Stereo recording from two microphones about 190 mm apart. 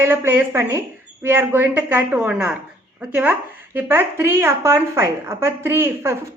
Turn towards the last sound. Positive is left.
turn(degrees=-15)  # may be behind; listen again after turning